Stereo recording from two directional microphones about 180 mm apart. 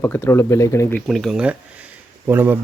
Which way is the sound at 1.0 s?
Centre (ahead or behind).